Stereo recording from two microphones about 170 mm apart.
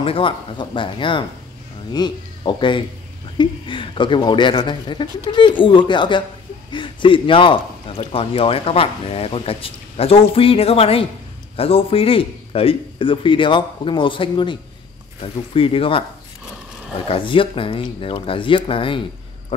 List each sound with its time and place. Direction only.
0.0 s speech: 30° left (ahead or behind)
17.1 s speech: 30° left (ahead or behind)